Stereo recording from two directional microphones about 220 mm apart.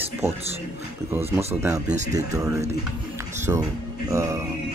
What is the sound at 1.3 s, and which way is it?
Speech, 10° right (ahead or behind).